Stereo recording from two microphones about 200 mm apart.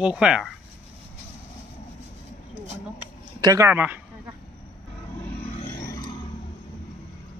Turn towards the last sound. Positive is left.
turn(degrees=40)  # may be behind; listen again after turning